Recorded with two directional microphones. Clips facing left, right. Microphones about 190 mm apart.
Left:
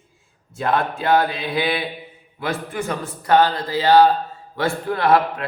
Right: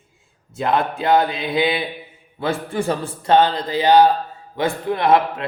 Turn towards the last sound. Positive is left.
turn(degrees=-20)  # may be behind; listen again after turning